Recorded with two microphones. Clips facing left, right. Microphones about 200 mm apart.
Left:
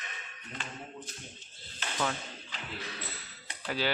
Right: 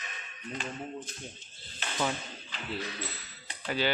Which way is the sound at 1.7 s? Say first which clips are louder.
Right 1 dB; 15° right (ahead or behind).